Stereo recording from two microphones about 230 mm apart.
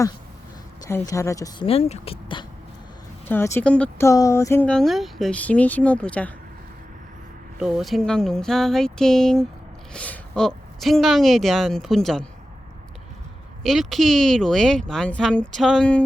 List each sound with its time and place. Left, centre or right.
0.9 s speech: centre
3.2 s speech: centre
7.6 s speech: centre
13.6 s speech: centre